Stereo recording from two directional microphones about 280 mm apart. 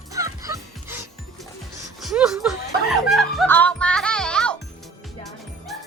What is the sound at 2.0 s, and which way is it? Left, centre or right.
Music, centre.